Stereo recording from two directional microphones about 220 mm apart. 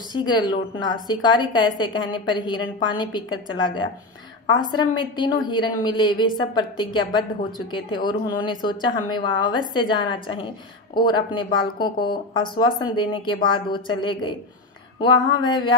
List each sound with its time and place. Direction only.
0.1 s a woman's voice: 20° left (ahead or behind)